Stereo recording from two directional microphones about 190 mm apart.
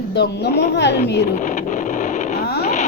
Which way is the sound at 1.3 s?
45° left (ahead or behind).